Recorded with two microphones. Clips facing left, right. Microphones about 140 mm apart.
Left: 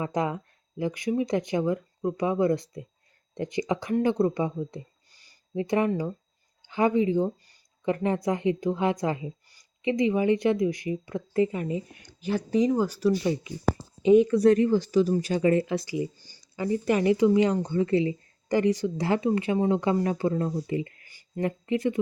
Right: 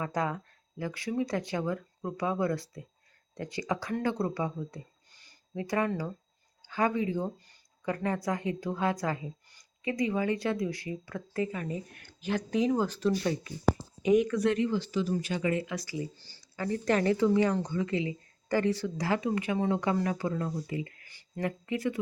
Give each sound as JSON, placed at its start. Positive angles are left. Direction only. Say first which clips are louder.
{"t": 0.0, "sound": "speech", "louder": "left 4 dB", "side_deg": 20}
{"t": 12.0, "sound": "speech", "louder": "left 2 dB", "side_deg": 10}
{"t": 14.0, "sound": "speech", "louder": "left 7 dB", "side_deg": 30}
{"t": 15.9, "sound": "speech", "louder": "left 6 dB", "side_deg": 15}
{"t": 17.7, "sound": "speech", "louder": "left 7 dB", "side_deg": 35}
{"t": 18.4, "sound": "speech", "louder": "left 4 dB", "side_deg": 15}
{"t": 21.1, "sound": "a sound", "louder": "left 5 dB", "side_deg": 20}